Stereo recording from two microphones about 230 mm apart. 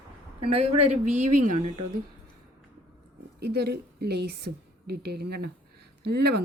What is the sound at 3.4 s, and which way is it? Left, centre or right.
A woman's voice, right.